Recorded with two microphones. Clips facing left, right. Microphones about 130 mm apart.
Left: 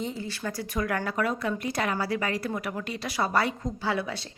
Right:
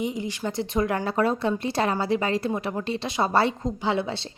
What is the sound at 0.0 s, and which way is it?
Speech, 15° right (ahead or behind).